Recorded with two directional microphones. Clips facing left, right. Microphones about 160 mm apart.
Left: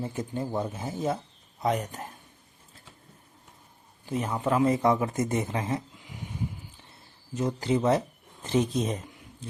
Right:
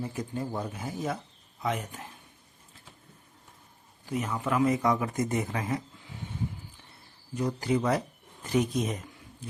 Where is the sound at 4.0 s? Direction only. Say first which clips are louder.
Left 3 dB; 30° left (ahead or behind).